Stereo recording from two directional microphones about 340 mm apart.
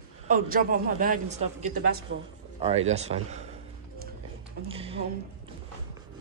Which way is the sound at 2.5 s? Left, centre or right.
Centre.